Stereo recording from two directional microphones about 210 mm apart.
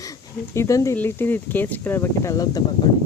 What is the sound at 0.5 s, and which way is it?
Speech, 15° left (ahead or behind).